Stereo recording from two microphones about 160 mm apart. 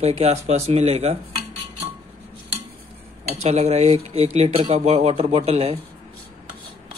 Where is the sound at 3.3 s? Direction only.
45° right (ahead or behind).